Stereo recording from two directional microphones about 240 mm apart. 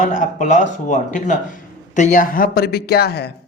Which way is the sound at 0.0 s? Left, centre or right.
Left.